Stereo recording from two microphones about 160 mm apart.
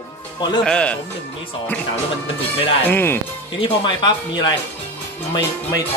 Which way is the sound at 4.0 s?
25° left (ahead or behind).